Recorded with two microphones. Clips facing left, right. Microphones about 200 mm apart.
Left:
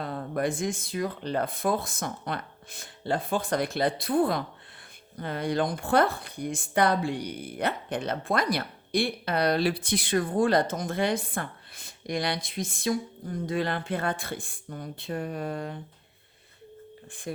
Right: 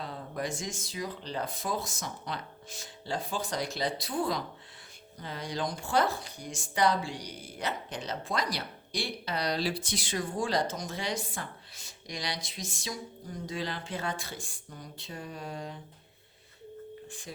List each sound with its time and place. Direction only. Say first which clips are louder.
0.0 s speech: left 7 dB; 55° left (ahead or behind)
17.1 s speech: left 8 dB; 55° left (ahead or behind)